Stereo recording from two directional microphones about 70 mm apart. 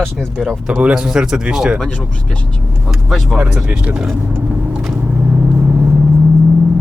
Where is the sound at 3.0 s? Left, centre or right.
Centre.